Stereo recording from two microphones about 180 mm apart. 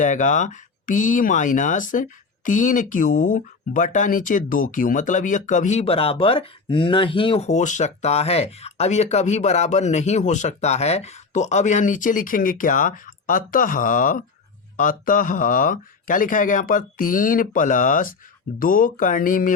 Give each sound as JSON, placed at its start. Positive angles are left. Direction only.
{"t": 0.0, "sound": "speech", "side_deg": 45}